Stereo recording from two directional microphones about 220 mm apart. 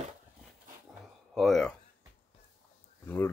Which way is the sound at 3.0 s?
10° left (ahead or behind).